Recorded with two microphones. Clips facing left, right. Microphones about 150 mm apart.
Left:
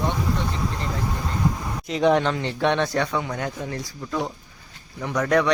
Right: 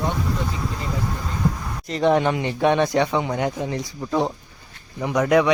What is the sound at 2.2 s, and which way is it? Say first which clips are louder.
A man's voice: right 3 dB; 15° right (ahead or behind).